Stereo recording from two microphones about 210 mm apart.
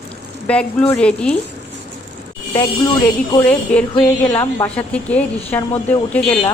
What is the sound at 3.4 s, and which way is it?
A woman's voice, 5° left (ahead or behind).